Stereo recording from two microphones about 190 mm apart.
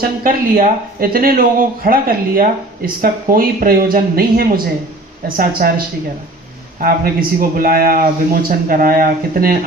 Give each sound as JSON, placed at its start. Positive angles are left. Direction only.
{"t": 0.0, "sound": "speech", "side_deg": -50}